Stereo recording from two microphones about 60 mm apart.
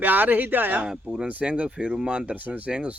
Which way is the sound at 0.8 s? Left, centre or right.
Centre.